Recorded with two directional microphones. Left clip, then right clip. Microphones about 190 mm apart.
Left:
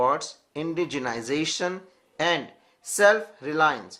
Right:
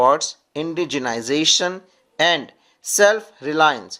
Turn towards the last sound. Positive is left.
turn(degrees=-40)  # may be behind; listen again after turning